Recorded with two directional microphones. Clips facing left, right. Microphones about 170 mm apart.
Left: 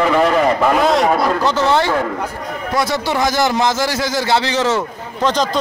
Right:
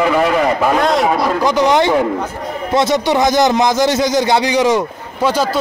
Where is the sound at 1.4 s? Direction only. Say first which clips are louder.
Right 3 dB; 15° right (ahead or behind).